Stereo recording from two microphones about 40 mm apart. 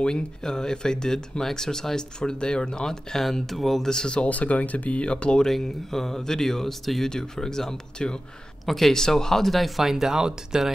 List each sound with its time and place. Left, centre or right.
0.0 s speech: centre
3.9 s speech: centre
4.2 s speech: left
5.4 s speech: centre
7.1 s speech: centre
8.6 s speech: centre